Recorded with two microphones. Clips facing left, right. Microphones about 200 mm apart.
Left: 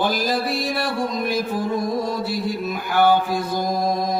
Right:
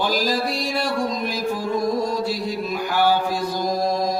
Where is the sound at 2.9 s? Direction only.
55° left (ahead or behind).